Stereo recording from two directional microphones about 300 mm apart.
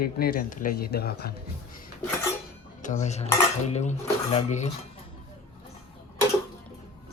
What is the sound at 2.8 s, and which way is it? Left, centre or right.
Speech, left.